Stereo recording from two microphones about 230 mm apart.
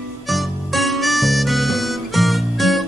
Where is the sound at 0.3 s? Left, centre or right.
Centre.